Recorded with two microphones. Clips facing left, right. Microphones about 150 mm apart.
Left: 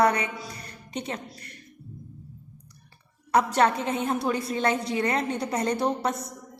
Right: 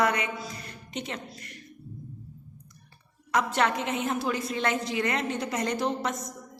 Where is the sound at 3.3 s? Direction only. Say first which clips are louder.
Left 4 dB; 35° left (ahead or behind).